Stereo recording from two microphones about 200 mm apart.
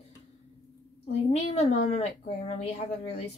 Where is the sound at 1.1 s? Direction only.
35° left (ahead or behind).